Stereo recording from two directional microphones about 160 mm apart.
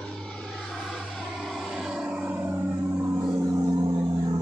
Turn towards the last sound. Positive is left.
turn(degrees=-25)  # may be behind; listen again after turning